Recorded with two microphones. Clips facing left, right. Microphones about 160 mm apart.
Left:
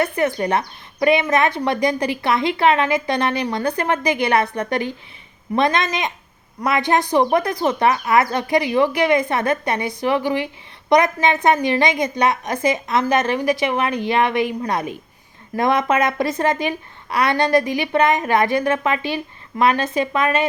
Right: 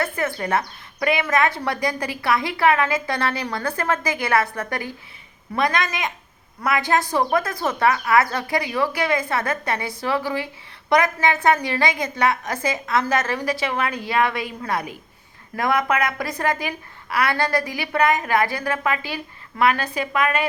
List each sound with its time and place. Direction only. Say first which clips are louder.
0.0 s speech: left 5 dB; 20° left (ahead or behind)